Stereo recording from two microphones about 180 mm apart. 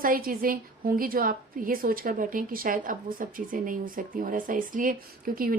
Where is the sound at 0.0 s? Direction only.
50° right (ahead or behind).